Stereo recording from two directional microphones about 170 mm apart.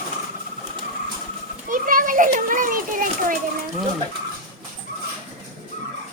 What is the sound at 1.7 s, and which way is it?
A child's voice, 55° right (ahead or behind).